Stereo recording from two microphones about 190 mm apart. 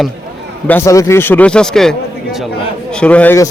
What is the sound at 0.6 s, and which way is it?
A man's voice, 15° left (ahead or behind).